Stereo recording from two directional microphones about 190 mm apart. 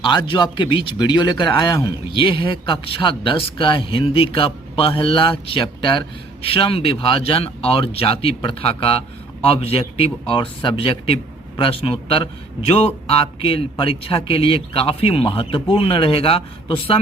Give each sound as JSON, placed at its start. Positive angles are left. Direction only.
{"t": 0.0, "sound": "speech", "side_deg": 25}